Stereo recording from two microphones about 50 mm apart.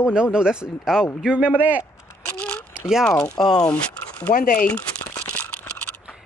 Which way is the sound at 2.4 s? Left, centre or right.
Centre.